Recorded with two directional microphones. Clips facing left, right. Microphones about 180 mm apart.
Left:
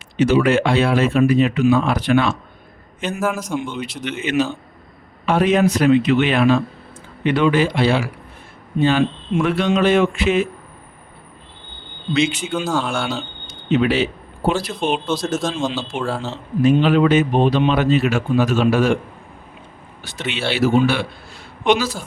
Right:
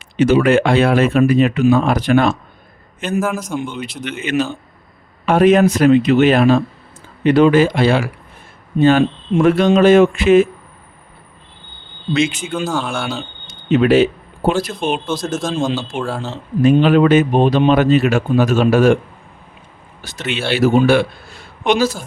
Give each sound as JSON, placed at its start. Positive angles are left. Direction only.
{"t": 0.2, "sound": "speech", "side_deg": -55}
{"t": 3.2, "sound": "speech", "side_deg": 0}
{"t": 3.8, "sound": "speech", "side_deg": -50}
{"t": 12.1, "sound": "speech", "side_deg": -50}
{"t": 12.6, "sound": "speech", "side_deg": 0}
{"t": 13.7, "sound": "speech", "side_deg": -50}
{"t": 14.8, "sound": "speech", "side_deg": -5}
{"t": 15.3, "sound": "a man's voice", "side_deg": 5}
{"t": 16.7, "sound": "speech", "side_deg": -50}
{"t": 20.0, "sound": "speech", "side_deg": -40}